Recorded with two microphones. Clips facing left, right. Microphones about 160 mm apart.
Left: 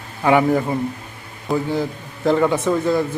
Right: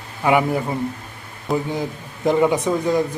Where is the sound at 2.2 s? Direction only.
15° right (ahead or behind).